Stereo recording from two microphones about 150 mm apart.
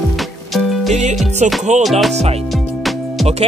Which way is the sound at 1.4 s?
50° right (ahead or behind).